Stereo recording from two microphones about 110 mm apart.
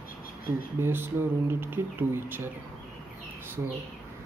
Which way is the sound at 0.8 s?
20° right (ahead or behind).